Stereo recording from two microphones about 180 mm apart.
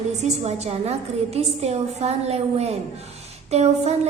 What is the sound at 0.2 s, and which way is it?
A woman's voice, 40° right (ahead or behind).